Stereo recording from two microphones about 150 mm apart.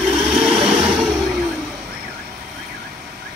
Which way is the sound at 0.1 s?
5° right (ahead or behind).